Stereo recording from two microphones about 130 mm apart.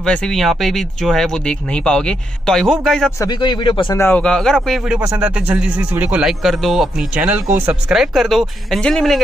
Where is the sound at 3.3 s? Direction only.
35° left (ahead or behind).